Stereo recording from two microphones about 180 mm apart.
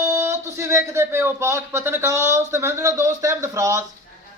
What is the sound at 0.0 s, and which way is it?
Speech, 15° right (ahead or behind).